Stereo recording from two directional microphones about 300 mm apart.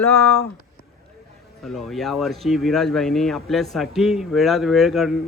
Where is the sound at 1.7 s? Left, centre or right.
Centre.